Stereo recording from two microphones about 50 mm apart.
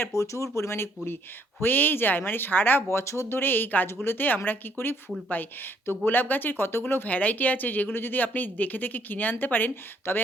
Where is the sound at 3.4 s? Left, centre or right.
Left.